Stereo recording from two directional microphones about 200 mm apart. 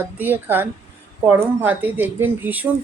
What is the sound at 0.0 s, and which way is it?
Speech, 10° right (ahead or behind).